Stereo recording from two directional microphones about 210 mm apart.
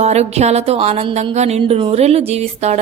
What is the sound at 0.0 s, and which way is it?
A woman's voice, 30° right (ahead or behind).